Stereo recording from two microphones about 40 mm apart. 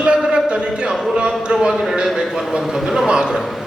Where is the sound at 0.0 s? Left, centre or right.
Right.